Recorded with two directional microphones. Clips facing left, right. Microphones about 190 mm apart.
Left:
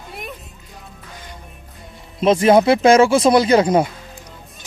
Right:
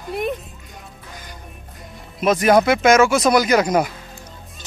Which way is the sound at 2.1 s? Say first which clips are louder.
Left 2 dB; 25° left (ahead or behind).